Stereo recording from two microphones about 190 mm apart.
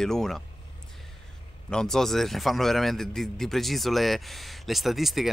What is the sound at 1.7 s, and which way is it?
A man's voice, 5° left (ahead or behind).